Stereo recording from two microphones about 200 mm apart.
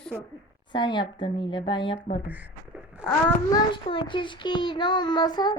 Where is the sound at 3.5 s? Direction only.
25° left (ahead or behind).